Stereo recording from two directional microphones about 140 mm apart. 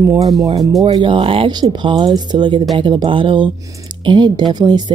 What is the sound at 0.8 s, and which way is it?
A woman's voice, 35° right (ahead or behind).